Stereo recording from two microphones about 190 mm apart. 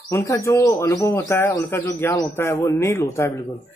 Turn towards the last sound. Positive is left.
turn(degrees=15)  # may be behind; listen again after turning